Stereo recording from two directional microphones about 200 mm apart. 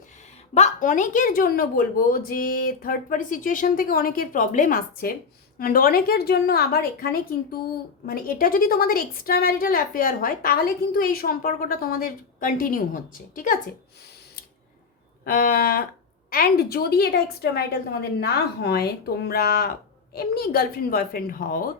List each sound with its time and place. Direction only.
0.5 s a woman's voice: 35° left (ahead or behind)
15.2 s a woman's voice: 45° left (ahead or behind)